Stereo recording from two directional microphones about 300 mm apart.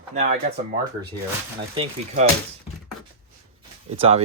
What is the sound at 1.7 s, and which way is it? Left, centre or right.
Speech, centre.